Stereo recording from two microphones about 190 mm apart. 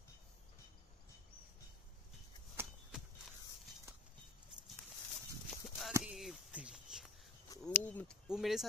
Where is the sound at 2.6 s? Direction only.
5° right (ahead or behind).